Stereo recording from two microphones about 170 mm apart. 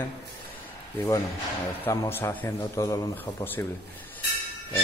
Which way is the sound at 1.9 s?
15° left (ahead or behind).